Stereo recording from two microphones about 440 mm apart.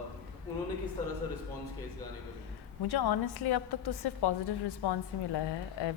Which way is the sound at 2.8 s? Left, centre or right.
Left.